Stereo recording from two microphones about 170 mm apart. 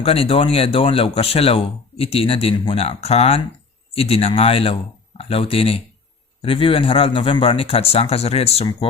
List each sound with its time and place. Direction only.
0.0 s speech: 35° left (ahead or behind)